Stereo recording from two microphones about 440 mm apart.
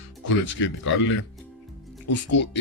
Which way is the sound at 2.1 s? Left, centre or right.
Left.